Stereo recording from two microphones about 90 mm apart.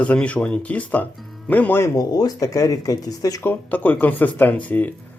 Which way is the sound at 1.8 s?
45° left (ahead or behind).